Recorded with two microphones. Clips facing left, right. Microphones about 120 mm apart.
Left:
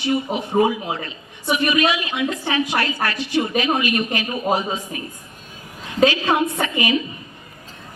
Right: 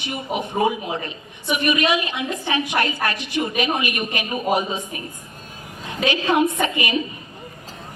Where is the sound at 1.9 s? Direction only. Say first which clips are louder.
Even; 20° right (ahead or behind).